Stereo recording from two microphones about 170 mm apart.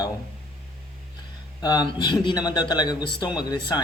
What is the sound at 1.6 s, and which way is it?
A man's voice, 25° left (ahead or behind).